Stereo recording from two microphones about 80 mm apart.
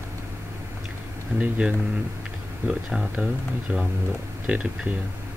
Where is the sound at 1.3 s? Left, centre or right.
Centre.